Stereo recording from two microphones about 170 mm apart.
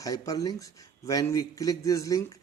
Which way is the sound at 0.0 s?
20° left (ahead or behind).